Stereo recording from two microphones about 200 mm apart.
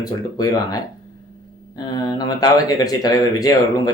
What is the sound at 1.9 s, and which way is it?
Speech, 20° left (ahead or behind).